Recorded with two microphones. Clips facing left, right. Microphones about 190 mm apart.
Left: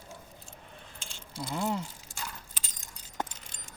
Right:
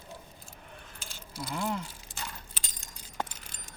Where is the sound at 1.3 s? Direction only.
25° left (ahead or behind).